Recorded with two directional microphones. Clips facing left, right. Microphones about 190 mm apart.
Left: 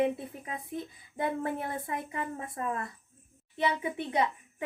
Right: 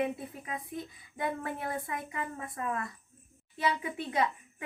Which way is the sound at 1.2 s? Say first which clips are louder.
Left 3 dB; 30° left (ahead or behind).